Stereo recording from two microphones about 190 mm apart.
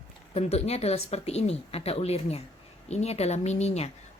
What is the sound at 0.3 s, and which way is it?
A woman's voice, 35° left (ahead or behind).